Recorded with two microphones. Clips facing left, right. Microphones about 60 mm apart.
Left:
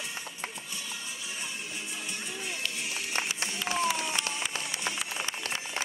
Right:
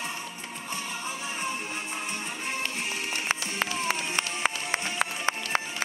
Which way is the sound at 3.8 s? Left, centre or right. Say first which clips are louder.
Even; right.